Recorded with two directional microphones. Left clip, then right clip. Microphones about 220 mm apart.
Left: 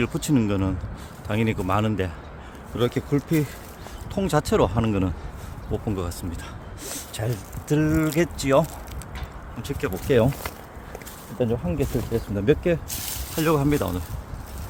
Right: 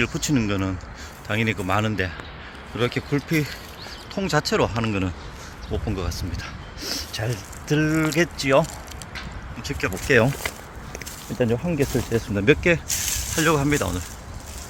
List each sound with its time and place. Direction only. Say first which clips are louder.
0.0 s speech: right 1 dB; 15° left (ahead or behind)
9.6 s speech: right 2 dB; 20° left (ahead or behind)
10.2 s speech: right 2 dB; 5° right (ahead or behind)
13.3 s speech: right 1 dB; 5° left (ahead or behind)